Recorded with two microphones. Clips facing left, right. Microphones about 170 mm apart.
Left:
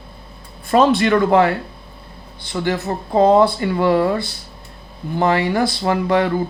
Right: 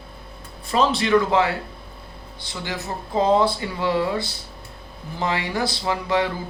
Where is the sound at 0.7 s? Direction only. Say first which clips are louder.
Left 5 dB; 55° left (ahead or behind).